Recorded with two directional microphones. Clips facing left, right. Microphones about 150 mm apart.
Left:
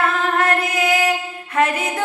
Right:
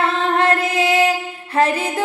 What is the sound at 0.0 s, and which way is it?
Female singing, 30° right (ahead or behind).